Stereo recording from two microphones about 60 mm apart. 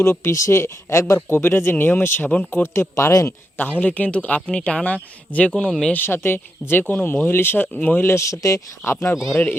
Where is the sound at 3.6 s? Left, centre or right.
Left.